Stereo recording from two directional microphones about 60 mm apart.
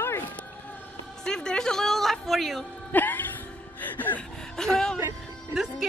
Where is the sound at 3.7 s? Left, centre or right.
Left.